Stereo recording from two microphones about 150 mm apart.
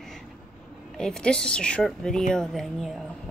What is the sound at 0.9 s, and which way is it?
Speech, 5° left (ahead or behind).